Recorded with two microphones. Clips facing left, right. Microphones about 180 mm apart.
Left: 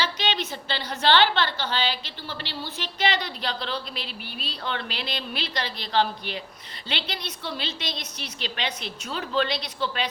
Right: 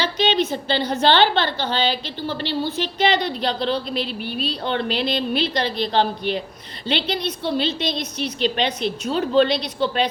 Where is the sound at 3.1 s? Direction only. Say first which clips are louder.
Right 8 dB; 20° right (ahead or behind).